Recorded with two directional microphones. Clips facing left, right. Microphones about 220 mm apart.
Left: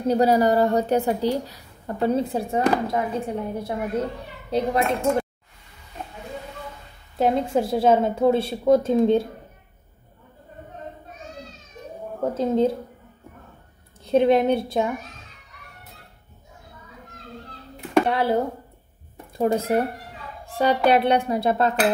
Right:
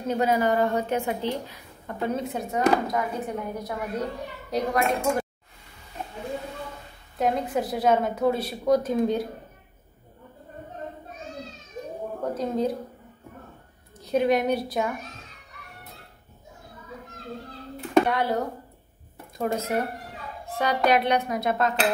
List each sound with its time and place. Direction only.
0.1 s a woman's voice: 35° left (ahead or behind)
7.2 s a woman's voice: 30° left (ahead or behind)
12.4 s a woman's voice: 25° left (ahead or behind)
14.0 s a woman's voice: 25° left (ahead or behind)
18.0 s a woman's voice: 30° left (ahead or behind)